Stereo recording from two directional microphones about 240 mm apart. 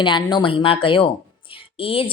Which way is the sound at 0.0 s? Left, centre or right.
Centre.